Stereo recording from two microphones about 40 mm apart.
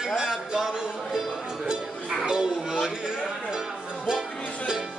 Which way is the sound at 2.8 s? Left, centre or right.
Centre.